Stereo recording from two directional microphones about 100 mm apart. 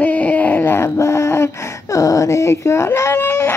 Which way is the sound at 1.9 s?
35° left (ahead or behind).